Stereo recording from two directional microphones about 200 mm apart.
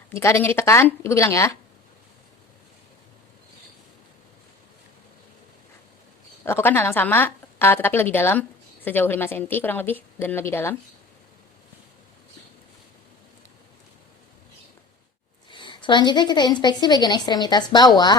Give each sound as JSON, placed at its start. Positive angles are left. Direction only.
{"t": 0.1, "sound": "speech", "side_deg": 15}
{"t": 6.4, "sound": "speech", "side_deg": 10}
{"t": 15.4, "sound": "a woman's voice", "side_deg": 25}